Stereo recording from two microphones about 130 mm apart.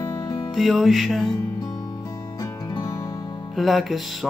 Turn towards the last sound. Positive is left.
turn(degrees=0)  # may be behind; listen again after turning